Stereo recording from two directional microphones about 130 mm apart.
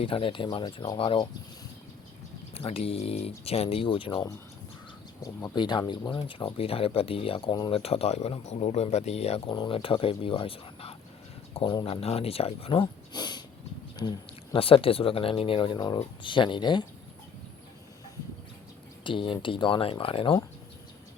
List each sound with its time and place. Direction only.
0.0 s speech: 45° left (ahead or behind)
2.6 s speech: 50° left (ahead or behind)
5.2 s speech: 30° left (ahead or behind)
7.7 s speech: 50° left (ahead or behind)
9.5 s speech: 40° left (ahead or behind)
19.0 s speech: 40° left (ahead or behind)